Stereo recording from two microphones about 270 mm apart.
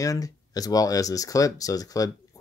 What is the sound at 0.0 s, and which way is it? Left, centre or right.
Speech, centre.